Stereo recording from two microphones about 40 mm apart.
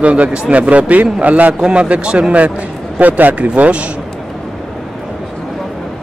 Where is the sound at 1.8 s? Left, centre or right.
Right.